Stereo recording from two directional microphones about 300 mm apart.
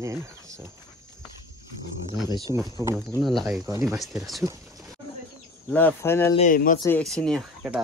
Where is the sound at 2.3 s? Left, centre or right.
Centre.